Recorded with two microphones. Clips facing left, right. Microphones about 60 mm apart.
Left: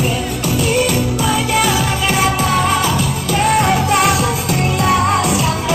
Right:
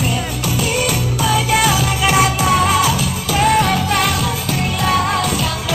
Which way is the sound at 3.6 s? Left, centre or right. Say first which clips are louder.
Left 3 dB; centre.